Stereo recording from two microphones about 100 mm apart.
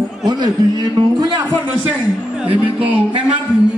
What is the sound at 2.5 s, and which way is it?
Speech, 70° right (ahead or behind).